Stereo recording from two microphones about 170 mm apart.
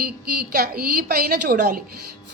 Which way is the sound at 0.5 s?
60° right (ahead or behind).